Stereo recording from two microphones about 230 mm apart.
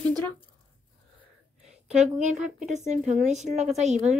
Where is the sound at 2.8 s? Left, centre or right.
Right.